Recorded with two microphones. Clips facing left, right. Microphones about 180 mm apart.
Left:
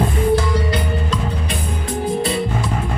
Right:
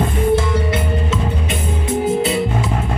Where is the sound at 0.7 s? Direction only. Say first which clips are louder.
Right 1 dB; 25° right (ahead or behind).